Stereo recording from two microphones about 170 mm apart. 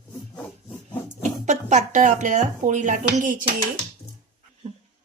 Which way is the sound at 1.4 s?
45° right (ahead or behind).